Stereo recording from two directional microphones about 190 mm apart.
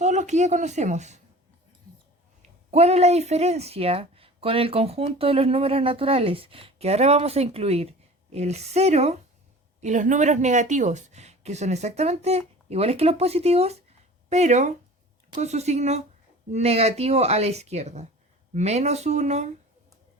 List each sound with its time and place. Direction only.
0.0 s speech: 40° right (ahead or behind)
2.6 s a woman's voice: 35° right (ahead or behind)